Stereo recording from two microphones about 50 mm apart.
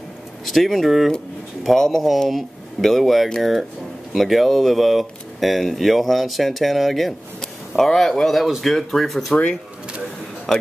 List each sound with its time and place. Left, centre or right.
0.5 s speech: centre
9.3 s speech: left